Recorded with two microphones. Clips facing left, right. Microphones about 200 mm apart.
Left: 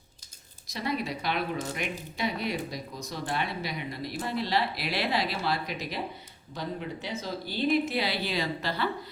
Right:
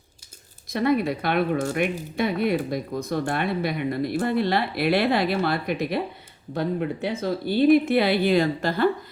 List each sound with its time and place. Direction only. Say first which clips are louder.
0.7 s speech: right 10 dB; 55° right (ahead or behind)